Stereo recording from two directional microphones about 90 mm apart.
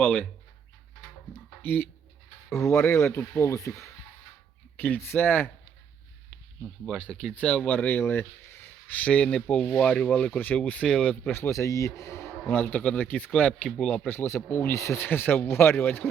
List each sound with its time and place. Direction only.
0.0 s speech: 15° left (ahead or behind)
1.3 s speech: 20° left (ahead or behind)
4.8 s a man's voice: 25° left (ahead or behind)
6.8 s speech: 5° left (ahead or behind)
11.3 s a man's voice: 35° left (ahead or behind); by 14.0 s 10° left (ahead or behind)
14.1 s a man's voice: 25° left (ahead or behind)